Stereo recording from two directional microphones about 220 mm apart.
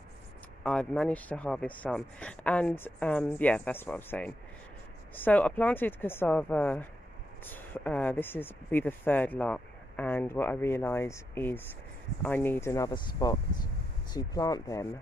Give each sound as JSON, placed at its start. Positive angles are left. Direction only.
{"t": 0.7, "sound": "speech", "side_deg": 5}